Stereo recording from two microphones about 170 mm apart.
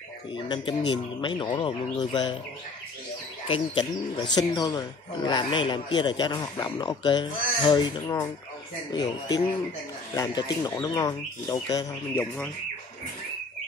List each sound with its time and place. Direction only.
0.5 s a man's voice: 30° left (ahead or behind)
3.4 s a man's voice: 30° left (ahead or behind)